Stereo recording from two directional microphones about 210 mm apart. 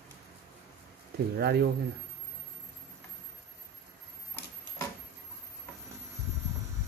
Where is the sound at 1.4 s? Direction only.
50° right (ahead or behind).